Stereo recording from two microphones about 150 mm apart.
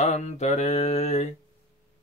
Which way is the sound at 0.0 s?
50° left (ahead or behind).